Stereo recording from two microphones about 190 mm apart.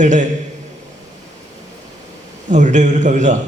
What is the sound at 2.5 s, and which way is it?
Speech, 40° right (ahead or behind).